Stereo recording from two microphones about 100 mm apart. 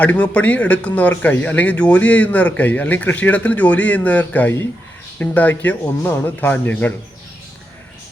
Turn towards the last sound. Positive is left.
turn(degrees=20)  # may be behind; listen again after turning